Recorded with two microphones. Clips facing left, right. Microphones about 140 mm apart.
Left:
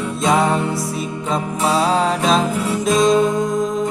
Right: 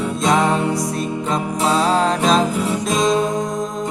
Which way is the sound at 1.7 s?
5° left (ahead or behind).